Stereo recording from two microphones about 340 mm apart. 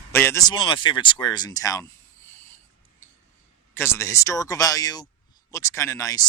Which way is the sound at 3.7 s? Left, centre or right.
Centre.